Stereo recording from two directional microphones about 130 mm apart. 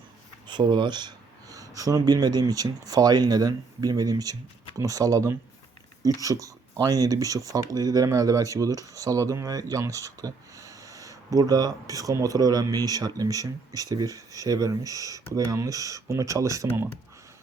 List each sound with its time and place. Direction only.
0.4 s speech: 35° right (ahead or behind)